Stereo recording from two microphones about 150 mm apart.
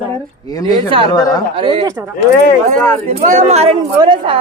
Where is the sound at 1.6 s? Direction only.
40° right (ahead or behind).